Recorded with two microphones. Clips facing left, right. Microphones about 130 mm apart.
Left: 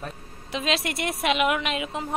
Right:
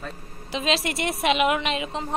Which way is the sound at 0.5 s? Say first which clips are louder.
Right 2 dB; centre (ahead or behind).